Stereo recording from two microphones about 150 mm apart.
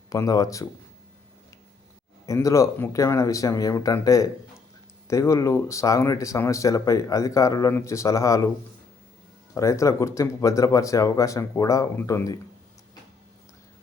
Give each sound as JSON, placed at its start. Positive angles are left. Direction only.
{"t": 0.1, "sound": "speech", "side_deg": 25}
{"t": 2.2, "sound": "speech", "side_deg": 20}
{"t": 9.6, "sound": "speech", "side_deg": 20}